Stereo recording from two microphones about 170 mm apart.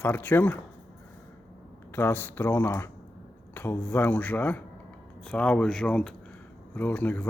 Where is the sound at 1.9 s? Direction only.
10° left (ahead or behind).